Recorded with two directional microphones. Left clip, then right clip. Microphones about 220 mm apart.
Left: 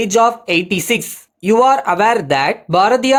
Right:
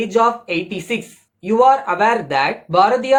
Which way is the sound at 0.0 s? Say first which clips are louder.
Left 3 dB; 45° left (ahead or behind).